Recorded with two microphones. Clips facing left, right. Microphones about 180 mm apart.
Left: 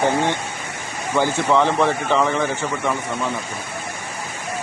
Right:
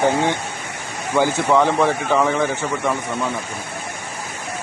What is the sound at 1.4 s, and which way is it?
Speech, 10° right (ahead or behind).